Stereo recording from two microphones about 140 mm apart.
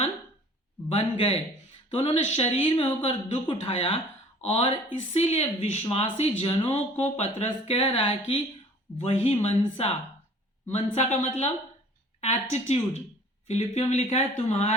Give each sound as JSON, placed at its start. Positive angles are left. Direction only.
{"t": 0.9, "sound": "speech", "side_deg": 45}